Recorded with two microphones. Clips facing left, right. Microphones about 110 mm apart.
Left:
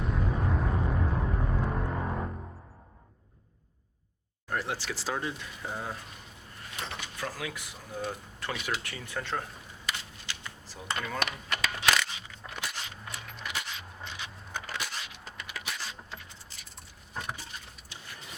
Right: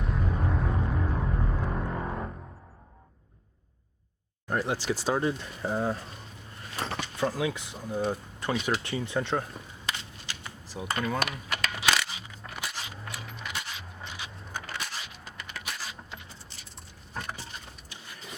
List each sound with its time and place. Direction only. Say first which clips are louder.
0.0 s music: even; centre (ahead or behind)
4.4 s speech: right 5 dB; 20° right (ahead or behind)
5.1 s speech: right 6 dB; 35° right (ahead or behind)
6.7 s a sound: right 6 dB; 40° right (ahead or behind)
7.2 s speech: right 9 dB; 25° right (ahead or behind)
10.2 s a sound: right 1 dB; 10° right (ahead or behind)